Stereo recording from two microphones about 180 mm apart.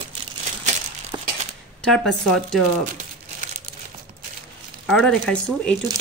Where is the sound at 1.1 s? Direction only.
25° right (ahead or behind).